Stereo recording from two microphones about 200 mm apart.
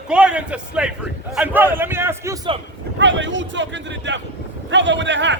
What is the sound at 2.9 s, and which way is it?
A man's voice, 65° right (ahead or behind).